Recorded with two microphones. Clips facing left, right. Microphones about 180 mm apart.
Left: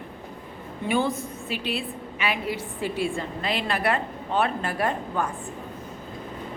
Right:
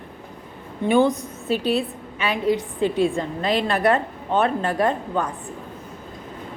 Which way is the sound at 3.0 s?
40° right (ahead or behind).